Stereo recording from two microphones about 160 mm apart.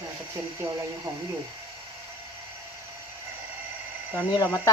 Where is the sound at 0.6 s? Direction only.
15° right (ahead or behind).